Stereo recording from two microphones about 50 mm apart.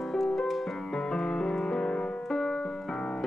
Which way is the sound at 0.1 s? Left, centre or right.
Centre.